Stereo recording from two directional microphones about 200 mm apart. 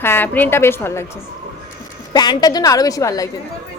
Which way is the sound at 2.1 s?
20° left (ahead or behind).